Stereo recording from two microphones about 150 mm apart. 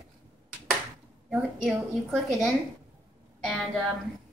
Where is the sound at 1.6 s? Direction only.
Centre (ahead or behind).